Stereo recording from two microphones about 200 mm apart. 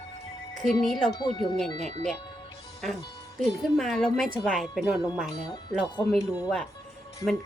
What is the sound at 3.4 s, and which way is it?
Speech, centre (ahead or behind).